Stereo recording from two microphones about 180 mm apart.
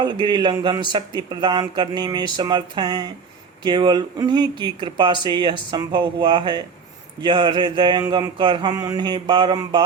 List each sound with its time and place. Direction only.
0.0 s speech: 25° right (ahead or behind)